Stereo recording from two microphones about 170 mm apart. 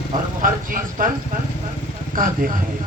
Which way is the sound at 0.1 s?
55° right (ahead or behind).